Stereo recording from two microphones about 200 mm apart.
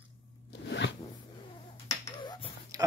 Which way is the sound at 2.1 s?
20° left (ahead or behind).